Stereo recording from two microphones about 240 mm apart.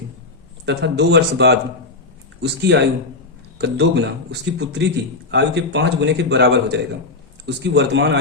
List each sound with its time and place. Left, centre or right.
0.6 s a man's voice: right